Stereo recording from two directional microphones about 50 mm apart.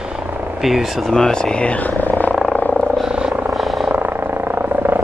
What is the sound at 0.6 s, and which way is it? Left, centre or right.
Speech, centre.